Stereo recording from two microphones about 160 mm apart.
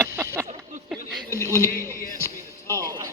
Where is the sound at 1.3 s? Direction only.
15° right (ahead or behind).